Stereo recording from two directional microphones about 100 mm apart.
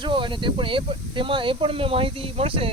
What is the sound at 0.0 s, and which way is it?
Speech, 55° right (ahead or behind).